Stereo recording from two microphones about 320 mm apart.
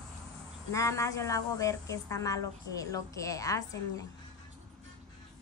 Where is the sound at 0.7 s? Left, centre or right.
Centre.